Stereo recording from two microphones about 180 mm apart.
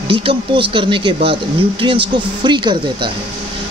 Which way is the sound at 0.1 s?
30° right (ahead or behind).